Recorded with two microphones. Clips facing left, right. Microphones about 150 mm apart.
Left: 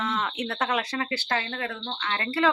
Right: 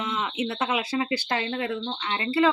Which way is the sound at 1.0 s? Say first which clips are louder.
Right 2 dB; 15° right (ahead or behind).